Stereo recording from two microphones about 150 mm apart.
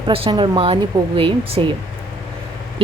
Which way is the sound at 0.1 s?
35° right (ahead or behind).